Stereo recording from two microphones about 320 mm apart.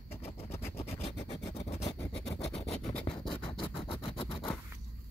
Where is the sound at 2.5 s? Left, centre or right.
Centre.